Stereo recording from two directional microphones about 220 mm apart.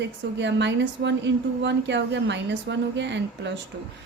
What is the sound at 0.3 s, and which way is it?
A woman's voice, 55° right (ahead or behind).